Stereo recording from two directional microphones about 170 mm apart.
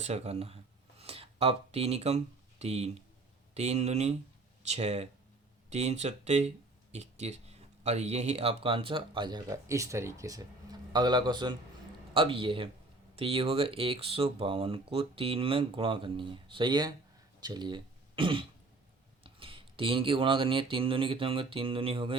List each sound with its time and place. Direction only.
0.0 s speech: 40° right (ahead or behind)